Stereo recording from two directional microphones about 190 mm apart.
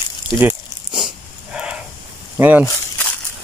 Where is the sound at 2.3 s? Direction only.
10° right (ahead or behind).